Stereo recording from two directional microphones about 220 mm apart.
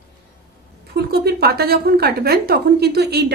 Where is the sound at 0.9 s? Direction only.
45° right (ahead or behind).